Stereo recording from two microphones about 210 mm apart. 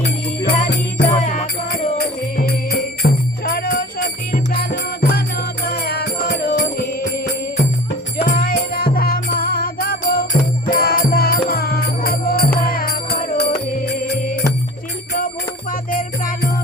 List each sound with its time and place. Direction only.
0.4 s music: 55° left (ahead or behind)
1.0 s music: 30° left (ahead or behind)
2.5 s jingle bell: 50° left (ahead or behind)
8.2 s music: 40° left (ahead or behind)
15.7 s music: 40° left (ahead or behind)